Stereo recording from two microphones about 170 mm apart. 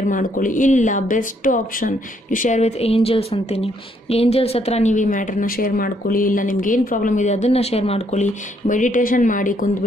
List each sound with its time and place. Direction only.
0.0 s speech: 50° left (ahead or behind)